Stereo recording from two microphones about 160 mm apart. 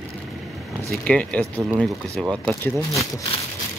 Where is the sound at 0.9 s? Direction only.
10° left (ahead or behind).